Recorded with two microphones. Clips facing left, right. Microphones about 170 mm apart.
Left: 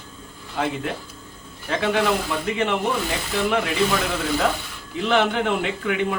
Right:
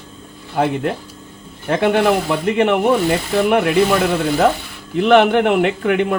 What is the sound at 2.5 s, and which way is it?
Speech, 65° right (ahead or behind).